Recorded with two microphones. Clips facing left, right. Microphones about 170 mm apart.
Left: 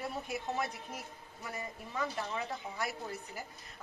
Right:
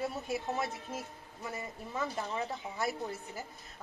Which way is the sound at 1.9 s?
25° right (ahead or behind).